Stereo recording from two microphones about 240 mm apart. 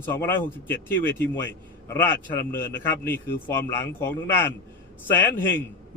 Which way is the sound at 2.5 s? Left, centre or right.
Left.